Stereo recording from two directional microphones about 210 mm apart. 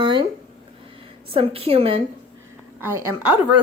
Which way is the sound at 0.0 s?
25° right (ahead or behind).